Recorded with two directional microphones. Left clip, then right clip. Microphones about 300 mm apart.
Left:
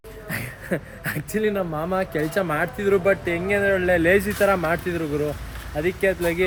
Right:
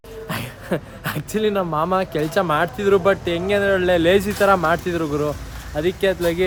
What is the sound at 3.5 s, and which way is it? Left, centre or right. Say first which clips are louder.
Speech: right 2 dB; centre.